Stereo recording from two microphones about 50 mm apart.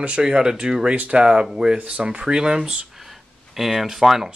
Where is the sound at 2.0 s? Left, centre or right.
Centre.